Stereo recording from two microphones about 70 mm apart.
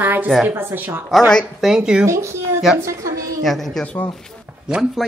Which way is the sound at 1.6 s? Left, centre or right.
Centre.